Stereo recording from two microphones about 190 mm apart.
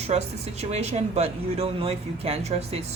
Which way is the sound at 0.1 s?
35° right (ahead or behind).